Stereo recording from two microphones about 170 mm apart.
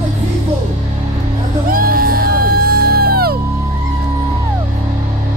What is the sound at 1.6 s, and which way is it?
Music, 55° right (ahead or behind).